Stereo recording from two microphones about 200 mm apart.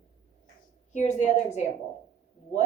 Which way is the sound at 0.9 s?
35° left (ahead or behind).